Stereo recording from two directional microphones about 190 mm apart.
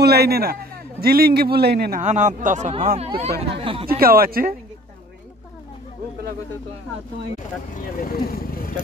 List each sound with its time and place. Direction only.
0.0 s a man's voice: 55° right (ahead or behind)
2.0 s speech: 40° right (ahead or behind)
3.0 s speech: 30° right (ahead or behind)
4.0 s a man's voice: 50° right (ahead or behind)
7.7 s speech: 45° left (ahead or behind)